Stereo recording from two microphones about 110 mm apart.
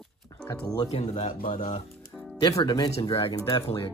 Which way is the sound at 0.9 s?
85° left.